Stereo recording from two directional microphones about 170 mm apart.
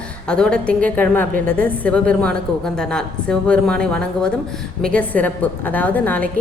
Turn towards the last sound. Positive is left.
turn(degrees=10)  # may be behind; listen again after turning